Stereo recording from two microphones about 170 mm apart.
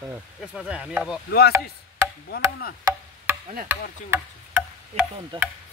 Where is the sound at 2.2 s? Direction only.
75° left (ahead or behind).